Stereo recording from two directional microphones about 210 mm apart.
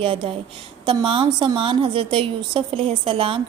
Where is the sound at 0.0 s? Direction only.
25° right (ahead or behind).